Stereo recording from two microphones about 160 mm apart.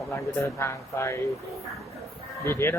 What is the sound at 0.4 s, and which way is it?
Speech, 15° left (ahead or behind).